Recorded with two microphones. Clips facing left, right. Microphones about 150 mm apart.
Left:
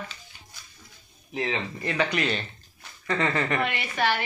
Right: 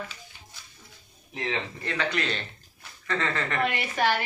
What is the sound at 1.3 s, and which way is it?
Speech, 10° left (ahead or behind).